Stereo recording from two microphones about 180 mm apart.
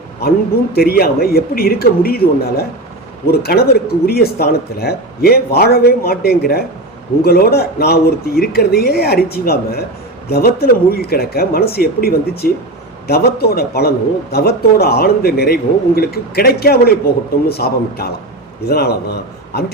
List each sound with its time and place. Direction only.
0.7 s a man's voice: 60° left (ahead or behind)